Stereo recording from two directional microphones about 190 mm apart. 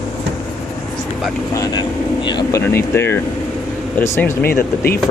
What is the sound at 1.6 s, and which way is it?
Speech, 20° left (ahead or behind).